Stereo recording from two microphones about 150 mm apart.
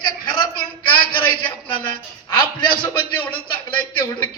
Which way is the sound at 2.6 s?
30° left (ahead or behind).